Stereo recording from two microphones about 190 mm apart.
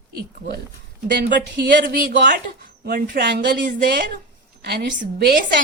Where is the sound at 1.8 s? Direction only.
50° right (ahead or behind).